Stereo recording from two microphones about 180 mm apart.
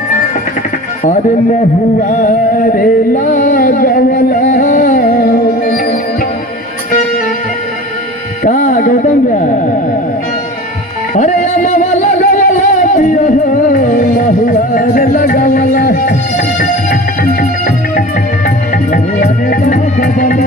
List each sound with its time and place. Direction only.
2.0 s music: 45° left (ahead or behind)
8.5 s a sound: 45° left (ahead or behind)
11.1 s music: 40° left (ahead or behind)